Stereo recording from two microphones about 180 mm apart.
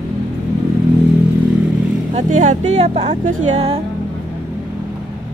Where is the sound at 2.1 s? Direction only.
45° right (ahead or behind).